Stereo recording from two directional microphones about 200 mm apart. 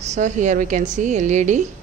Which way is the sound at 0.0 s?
35° right (ahead or behind).